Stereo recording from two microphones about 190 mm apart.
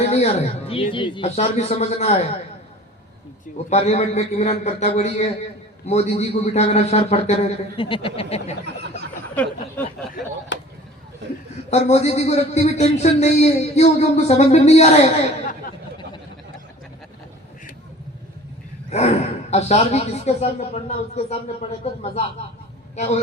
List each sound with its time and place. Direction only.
0.1 s a man's voice: 35° left (ahead or behind)
3.7 s a man's voice: 35° left (ahead or behind)
9.3 s speech: 5° left (ahead or behind)
10.5 s chop: 70° left (ahead or behind)
11.7 s a man's voice: 35° left (ahead or behind)
18.9 s a man's voice: 35° left (ahead or behind)
23.0 s a man's voice: 35° left (ahead or behind)